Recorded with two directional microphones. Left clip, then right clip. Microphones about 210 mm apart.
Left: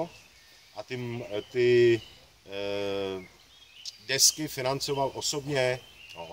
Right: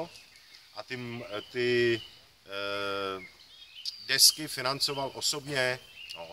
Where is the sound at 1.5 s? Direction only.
Centre (ahead or behind).